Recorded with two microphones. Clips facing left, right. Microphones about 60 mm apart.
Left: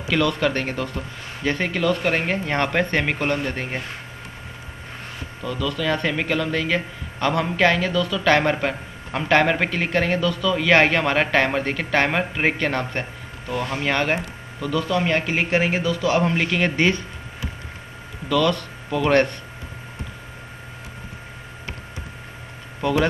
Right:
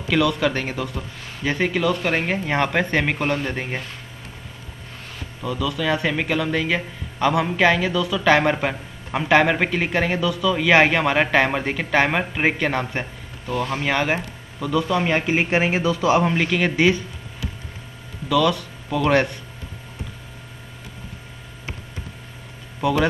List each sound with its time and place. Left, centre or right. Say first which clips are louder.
0.0 s a man's voice: right 1 dB; centre
5.4 s a man's voice: right 1 dB; centre
16.3 s a man's voice: right 1 dB; centre
18.3 s a man's voice: right 1 dB; centre